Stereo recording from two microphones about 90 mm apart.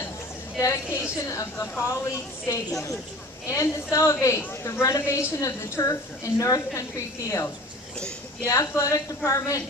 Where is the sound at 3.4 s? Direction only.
35° left (ahead or behind).